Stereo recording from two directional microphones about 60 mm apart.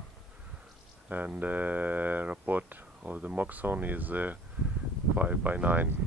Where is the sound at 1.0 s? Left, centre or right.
Right.